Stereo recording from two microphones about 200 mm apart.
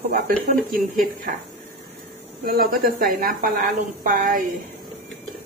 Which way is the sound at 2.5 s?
50° right (ahead or behind).